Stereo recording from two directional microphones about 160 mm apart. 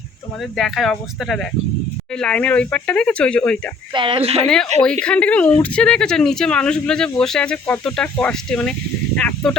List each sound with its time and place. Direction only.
0.5 s speech: centre (ahead or behind)
3.9 s speech: 30° right (ahead or behind)
5.0 s speech: 5° left (ahead or behind)